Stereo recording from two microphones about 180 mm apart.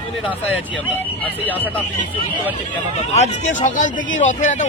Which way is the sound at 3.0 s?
40° left (ahead or behind).